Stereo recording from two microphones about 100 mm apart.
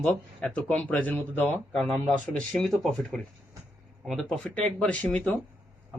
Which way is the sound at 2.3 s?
5° left (ahead or behind).